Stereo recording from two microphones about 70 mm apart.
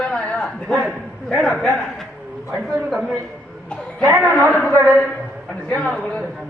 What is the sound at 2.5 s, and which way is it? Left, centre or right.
Speech, centre.